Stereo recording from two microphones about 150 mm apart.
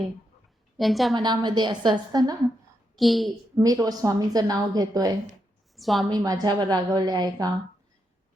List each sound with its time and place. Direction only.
0.8 s a child's voice: centre (ahead or behind)
1.1 s a woman's voice: 30° right (ahead or behind)
3.0 s a child's voice: centre (ahead or behind)
3.6 s a woman's voice: 25° right (ahead or behind)
5.7 s a woman's voice: centre (ahead or behind)
6.1 s a woman's voice: 25° right (ahead or behind)